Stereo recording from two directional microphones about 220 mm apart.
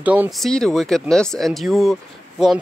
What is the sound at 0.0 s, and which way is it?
Speech, 5° right (ahead or behind).